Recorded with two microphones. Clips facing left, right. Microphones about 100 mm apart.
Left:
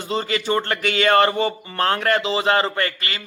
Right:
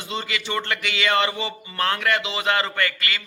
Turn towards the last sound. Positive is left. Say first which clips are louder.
# left 1 dB
turn(degrees=35)  # may be behind; listen again after turning